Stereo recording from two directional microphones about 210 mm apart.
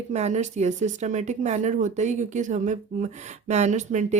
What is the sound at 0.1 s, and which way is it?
Speech, 30° right (ahead or behind).